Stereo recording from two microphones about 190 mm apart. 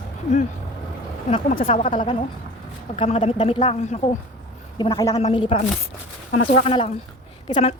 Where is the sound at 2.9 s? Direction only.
30° left (ahead or behind).